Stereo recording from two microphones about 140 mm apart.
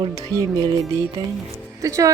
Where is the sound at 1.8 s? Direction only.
25° right (ahead or behind).